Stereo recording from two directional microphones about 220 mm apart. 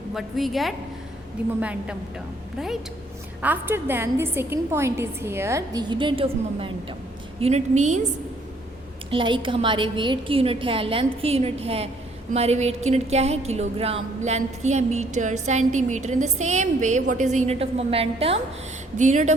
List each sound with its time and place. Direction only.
0.1 s a woman's voice: centre (ahead or behind)
3.4 s a woman's voice: 10° right (ahead or behind); by 8.1 s 35° right (ahead or behind)
9.0 s a woman's voice: 20° right (ahead or behind)